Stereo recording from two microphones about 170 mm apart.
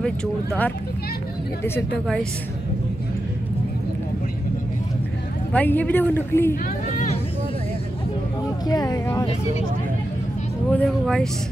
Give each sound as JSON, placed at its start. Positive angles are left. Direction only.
{"t": 0.0, "sound": "a man's voice", "side_deg": 5}
{"t": 5.5, "sound": "a man's voice", "side_deg": 10}
{"t": 6.9, "sound": "a sound", "side_deg": 45}
{"t": 8.6, "sound": "speech", "side_deg": 20}
{"t": 10.7, "sound": "speech", "side_deg": 5}